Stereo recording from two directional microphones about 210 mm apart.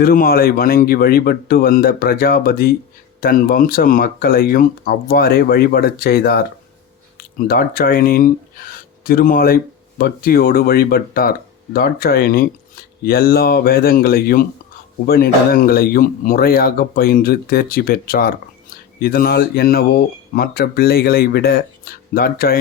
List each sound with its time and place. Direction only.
0.0 s speech: 45° left (ahead or behind)